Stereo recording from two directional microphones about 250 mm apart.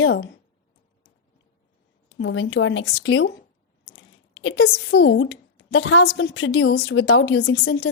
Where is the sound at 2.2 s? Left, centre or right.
Left.